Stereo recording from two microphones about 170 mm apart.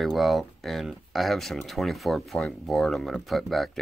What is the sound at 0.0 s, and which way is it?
Speech, centre (ahead or behind).